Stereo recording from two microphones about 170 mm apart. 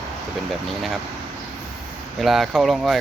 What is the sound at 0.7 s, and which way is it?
Speech, centre (ahead or behind).